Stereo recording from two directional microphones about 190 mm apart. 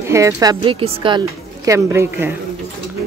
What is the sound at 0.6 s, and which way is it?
Speech, 30° right (ahead or behind).